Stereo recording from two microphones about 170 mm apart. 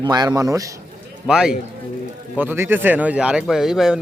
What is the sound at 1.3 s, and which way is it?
Speech, 5° right (ahead or behind).